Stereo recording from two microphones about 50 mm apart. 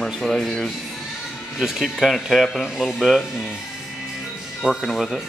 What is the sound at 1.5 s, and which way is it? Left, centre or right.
Speech, centre.